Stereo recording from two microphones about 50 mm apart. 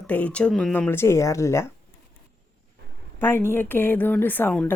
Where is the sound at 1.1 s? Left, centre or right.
Left.